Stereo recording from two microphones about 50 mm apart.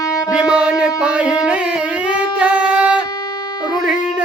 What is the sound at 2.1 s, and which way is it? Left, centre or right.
Singing, right.